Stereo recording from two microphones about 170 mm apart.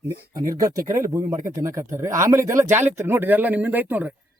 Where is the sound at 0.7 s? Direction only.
55° right (ahead or behind).